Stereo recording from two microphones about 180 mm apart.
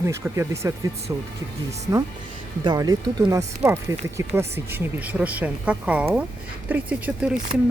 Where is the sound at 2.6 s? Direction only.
20° right (ahead or behind).